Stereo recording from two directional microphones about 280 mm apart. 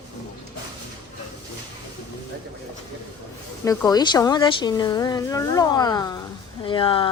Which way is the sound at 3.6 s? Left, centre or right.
Centre.